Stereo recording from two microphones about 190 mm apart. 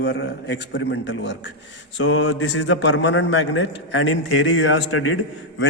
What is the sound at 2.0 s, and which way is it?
A man's voice, 90° left.